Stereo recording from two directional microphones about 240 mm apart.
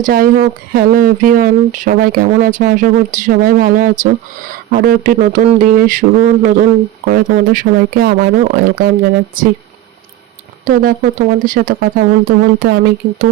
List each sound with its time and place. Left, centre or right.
0.0 s speech: right
11.4 s speech: right